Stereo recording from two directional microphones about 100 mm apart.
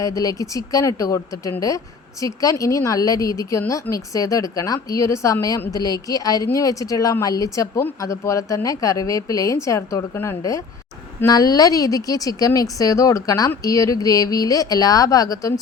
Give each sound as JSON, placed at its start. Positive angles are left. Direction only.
{"t": 0.0, "sound": "speech", "side_deg": 35}